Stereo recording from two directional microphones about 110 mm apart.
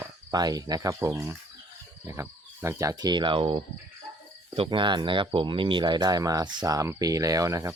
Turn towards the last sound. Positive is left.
turn(degrees=-30)  # may be behind; listen again after turning